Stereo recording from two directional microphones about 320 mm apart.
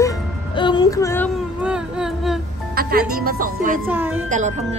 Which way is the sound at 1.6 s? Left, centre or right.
Centre.